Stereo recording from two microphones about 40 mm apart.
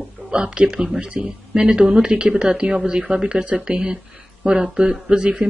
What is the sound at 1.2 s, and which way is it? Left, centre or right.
Speech, right.